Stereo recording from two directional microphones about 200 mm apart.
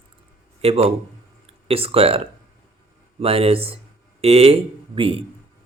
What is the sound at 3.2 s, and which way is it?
Speech, 30° right (ahead or behind).